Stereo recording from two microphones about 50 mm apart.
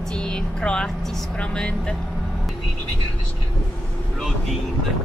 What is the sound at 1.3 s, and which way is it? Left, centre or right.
Speech, centre.